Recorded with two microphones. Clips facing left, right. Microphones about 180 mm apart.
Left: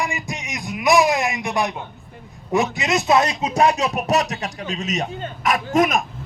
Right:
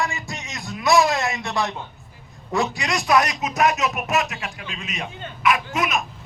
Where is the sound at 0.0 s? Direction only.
20° left (ahead or behind).